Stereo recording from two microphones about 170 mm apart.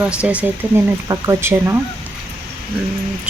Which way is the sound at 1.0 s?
20° right (ahead or behind).